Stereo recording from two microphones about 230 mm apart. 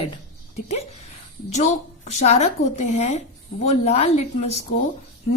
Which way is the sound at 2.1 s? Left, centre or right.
Left.